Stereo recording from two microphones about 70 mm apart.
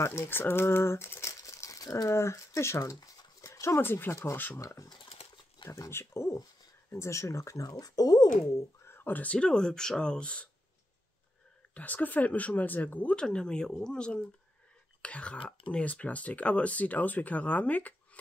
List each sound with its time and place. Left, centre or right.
0.0 s speech: left
1.3 s crumpling: left
2.1 s speech: left
4.6 s speech: left
5.9 s speech: left
7.6 s speech: left
8.8 s speech: left; by 10.5 s centre
11.7 s speech: left